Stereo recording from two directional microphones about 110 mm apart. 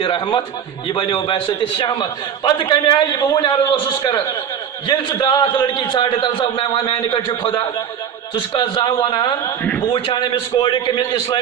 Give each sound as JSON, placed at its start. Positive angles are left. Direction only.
{"t": 0.0, "sound": "a man's voice", "side_deg": 40}
{"t": 9.6, "sound": "a man's voice", "side_deg": 10}
{"t": 9.9, "sound": "a man's voice", "side_deg": 45}